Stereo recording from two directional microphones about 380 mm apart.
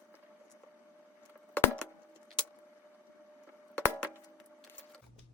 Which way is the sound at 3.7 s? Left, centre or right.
Centre.